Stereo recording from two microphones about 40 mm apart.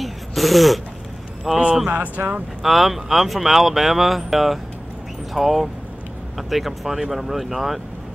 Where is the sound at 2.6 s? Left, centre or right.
Centre.